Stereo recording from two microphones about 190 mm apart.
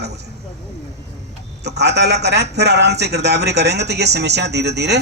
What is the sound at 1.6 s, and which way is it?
A man's voice, 60° right (ahead or behind).